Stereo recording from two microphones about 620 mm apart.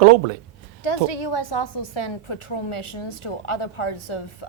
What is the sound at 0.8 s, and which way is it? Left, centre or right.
A woman's voice, left.